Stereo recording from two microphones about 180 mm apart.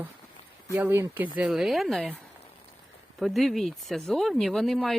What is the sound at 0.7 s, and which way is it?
Speech, 15° right (ahead or behind).